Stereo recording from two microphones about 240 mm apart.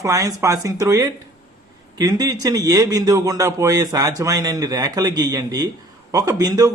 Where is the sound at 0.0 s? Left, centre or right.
Centre.